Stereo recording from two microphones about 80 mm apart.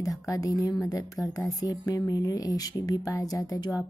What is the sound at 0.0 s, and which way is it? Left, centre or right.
Speech, left.